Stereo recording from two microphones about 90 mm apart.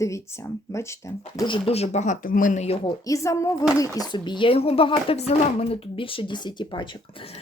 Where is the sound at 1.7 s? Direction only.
90° left.